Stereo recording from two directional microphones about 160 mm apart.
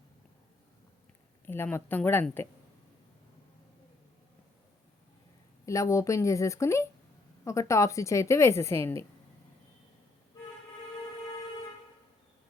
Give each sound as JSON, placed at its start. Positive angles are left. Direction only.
{"t": 1.5, "sound": "speech", "side_deg": 15}
{"t": 5.6, "sound": "a woman's voice", "side_deg": 20}